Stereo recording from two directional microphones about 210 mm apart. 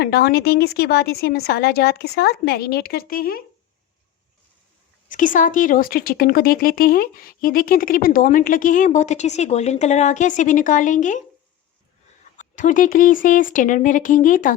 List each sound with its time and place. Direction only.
0.0 s speech: 50° left (ahead or behind)
5.0 s speech: 40° left (ahead or behind)
12.4 s speech: 35° left (ahead or behind)